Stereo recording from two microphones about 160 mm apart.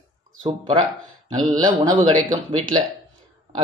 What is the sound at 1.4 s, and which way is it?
Speech, 30° right (ahead or behind).